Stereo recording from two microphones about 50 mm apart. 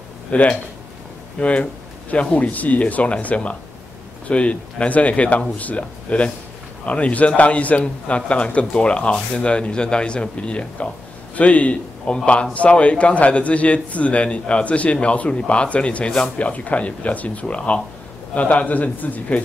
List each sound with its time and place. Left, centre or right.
0.3 s a man's voice: left
17.6 s a man's voice: centre